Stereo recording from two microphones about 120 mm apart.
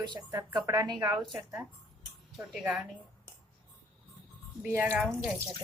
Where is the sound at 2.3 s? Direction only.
5° right (ahead or behind).